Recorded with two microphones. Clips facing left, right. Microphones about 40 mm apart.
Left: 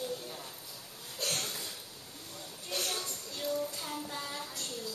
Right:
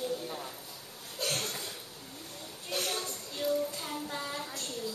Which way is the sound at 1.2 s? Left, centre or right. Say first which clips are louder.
Right 2 dB; centre.